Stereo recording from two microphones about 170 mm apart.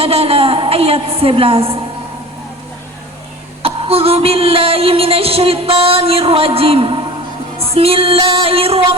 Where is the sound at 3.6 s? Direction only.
35° right (ahead or behind).